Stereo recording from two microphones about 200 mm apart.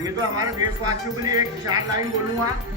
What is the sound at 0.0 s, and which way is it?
Speech, 20° right (ahead or behind).